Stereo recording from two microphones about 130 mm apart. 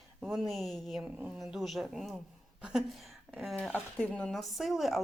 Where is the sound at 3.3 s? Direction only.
Centre (ahead or behind).